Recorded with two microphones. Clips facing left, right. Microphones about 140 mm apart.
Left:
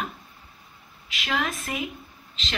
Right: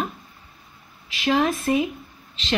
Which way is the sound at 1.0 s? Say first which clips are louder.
Right 8 dB; 30° right (ahead or behind).